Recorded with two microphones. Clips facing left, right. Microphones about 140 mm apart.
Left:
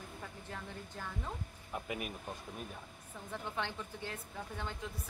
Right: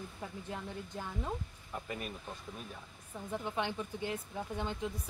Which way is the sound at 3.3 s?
15° right (ahead or behind).